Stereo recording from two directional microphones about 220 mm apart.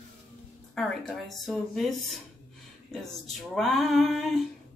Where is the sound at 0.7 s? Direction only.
Centre (ahead or behind).